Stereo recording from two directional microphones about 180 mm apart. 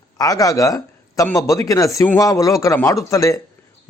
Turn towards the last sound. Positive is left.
turn(degrees=20)  # may be behind; listen again after turning